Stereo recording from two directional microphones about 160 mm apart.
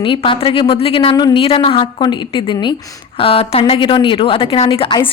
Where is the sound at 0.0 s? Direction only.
30° left (ahead or behind).